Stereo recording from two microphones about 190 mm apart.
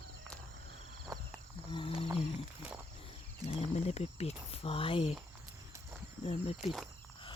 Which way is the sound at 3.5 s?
35° left (ahead or behind).